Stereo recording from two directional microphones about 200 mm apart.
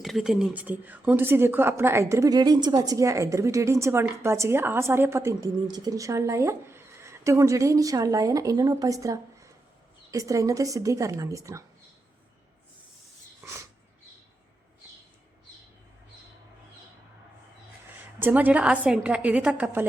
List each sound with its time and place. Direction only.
0.0 s a woman's voice: centre (ahead or behind)
13.4 s a sound: 15° right (ahead or behind)
18.2 s a woman's voice: 10° right (ahead or behind)